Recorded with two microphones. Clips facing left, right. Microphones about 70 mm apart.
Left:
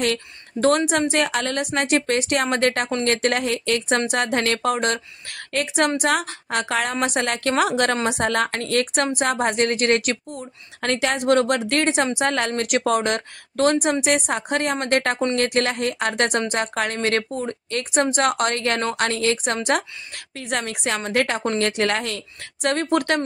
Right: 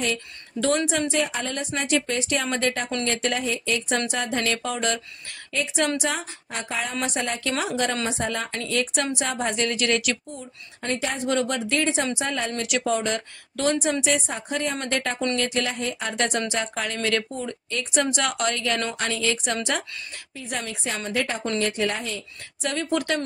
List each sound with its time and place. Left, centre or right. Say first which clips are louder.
0.0 s speech: left 4 dB; left
1.1 s speech: left 4 dB; left
10.8 s a woman's voice: left 5 dB; left
11.2 s speech: left 6 dB; left
20.3 s speech: left 5 dB; left